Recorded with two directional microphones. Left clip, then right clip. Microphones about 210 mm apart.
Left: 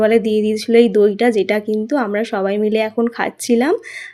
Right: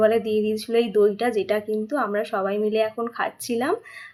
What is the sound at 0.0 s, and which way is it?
Speech, 40° left (ahead or behind).